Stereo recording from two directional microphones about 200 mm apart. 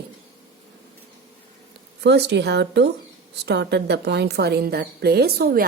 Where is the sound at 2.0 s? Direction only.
60° right (ahead or behind).